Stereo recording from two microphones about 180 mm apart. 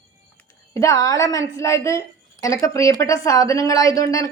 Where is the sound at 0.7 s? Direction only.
15° left (ahead or behind).